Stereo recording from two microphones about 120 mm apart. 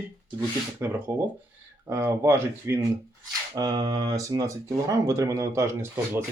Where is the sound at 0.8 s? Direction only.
20° right (ahead or behind).